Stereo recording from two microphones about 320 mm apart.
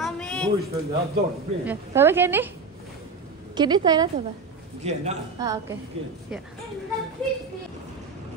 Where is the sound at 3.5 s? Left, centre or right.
Centre.